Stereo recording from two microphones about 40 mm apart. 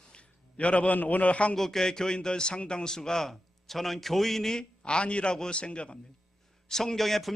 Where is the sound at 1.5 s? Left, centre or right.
Centre; by 6.0 s left.